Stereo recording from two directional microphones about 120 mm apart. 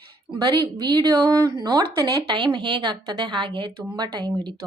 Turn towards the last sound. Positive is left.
turn(degrees=-40)  # may be behind; listen again after turning